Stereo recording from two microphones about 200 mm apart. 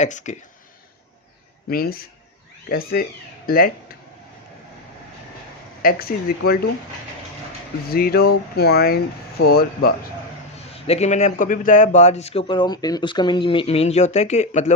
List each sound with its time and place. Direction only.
0.0 s a man's voice: 35° left (ahead or behind)
1.7 s speech: 50° left (ahead or behind)
5.8 s speech: 50° left (ahead or behind)
7.9 s speech: 50° left (ahead or behind)
10.8 s a man's voice: 35° left (ahead or behind)